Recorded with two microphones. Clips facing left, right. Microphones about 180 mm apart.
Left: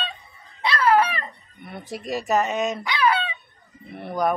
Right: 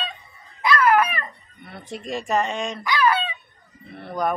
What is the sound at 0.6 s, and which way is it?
Dog, 30° left (ahead or behind).